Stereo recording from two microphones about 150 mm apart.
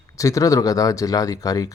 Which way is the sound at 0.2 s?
20° left (ahead or behind).